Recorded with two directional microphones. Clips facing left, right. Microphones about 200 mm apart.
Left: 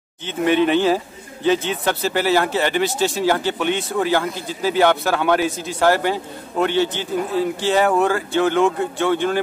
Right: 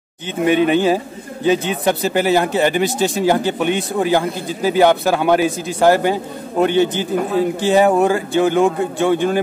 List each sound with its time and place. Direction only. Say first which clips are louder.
0.5 s a man's voice: right 2 dB; 15° right (ahead or behind)